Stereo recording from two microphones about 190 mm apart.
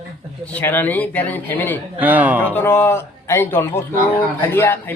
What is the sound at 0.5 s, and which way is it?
A man's voice, 10° left (ahead or behind).